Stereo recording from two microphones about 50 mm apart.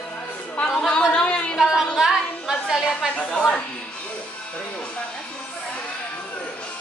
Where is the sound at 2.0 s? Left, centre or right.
Centre.